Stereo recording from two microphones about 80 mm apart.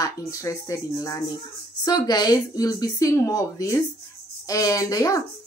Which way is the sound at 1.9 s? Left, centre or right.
Left.